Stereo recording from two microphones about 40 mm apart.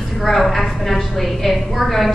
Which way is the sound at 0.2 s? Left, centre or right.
Centre.